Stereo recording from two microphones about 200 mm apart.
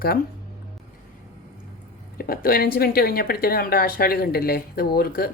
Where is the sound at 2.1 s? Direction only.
45° left (ahead or behind).